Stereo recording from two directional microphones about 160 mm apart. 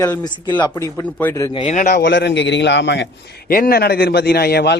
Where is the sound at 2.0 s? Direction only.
90° left.